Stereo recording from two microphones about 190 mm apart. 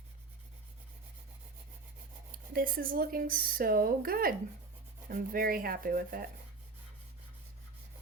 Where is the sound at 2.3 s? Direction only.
50° right (ahead or behind).